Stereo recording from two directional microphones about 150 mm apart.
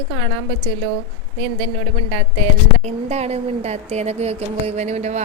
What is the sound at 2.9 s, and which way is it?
Speech, 45° right (ahead or behind).